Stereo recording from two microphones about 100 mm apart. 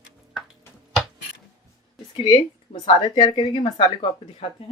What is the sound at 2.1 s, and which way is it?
A woman's voice, 55° left (ahead or behind).